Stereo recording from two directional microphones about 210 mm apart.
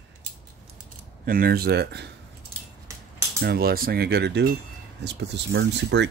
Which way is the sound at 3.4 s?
45° right (ahead or behind).